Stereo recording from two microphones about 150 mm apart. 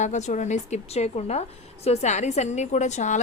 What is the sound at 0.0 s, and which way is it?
A woman's voice, 50° left (ahead or behind).